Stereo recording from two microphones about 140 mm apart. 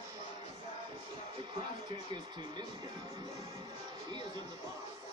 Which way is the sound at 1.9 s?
35° right (ahead or behind).